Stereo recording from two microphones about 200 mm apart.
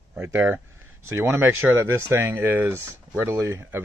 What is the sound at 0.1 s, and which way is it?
Speech, 10° right (ahead or behind).